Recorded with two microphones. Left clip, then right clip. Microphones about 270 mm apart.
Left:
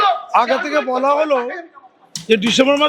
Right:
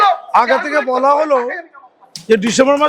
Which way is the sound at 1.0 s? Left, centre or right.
Left.